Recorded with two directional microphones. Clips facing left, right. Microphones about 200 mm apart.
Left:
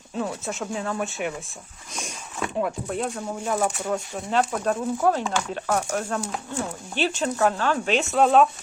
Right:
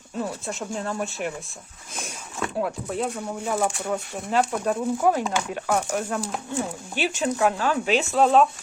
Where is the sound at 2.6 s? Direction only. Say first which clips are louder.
Even; centre (ahead or behind).